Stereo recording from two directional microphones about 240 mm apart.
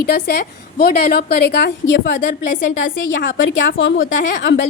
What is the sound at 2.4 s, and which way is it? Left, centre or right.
Speech, left.